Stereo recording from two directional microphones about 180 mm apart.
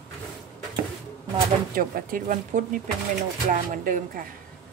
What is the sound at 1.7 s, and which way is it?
Speech, 50° right (ahead or behind).